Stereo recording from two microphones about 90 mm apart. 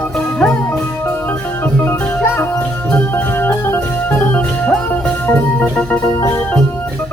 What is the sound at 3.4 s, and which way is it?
Music, 25° left (ahead or behind).